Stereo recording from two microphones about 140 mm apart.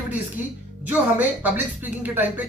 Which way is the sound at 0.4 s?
10° right (ahead or behind).